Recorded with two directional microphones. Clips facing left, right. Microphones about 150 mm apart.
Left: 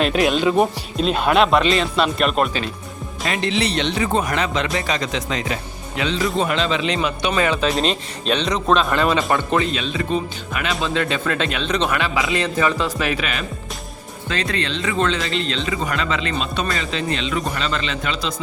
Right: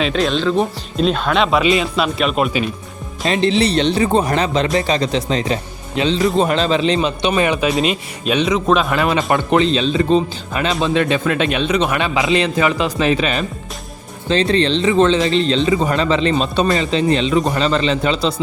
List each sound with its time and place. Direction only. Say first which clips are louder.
0.0 s speech: even; centre (ahead or behind)
3.2 s speech: right 6 dB; 30° right (ahead or behind)
7.7 s speech: right 3 dB; 5° right (ahead or behind)
9.3 s speech: right 5 dB; 20° right (ahead or behind)
11.9 s speech: right 5 dB; 20° right (ahead or behind)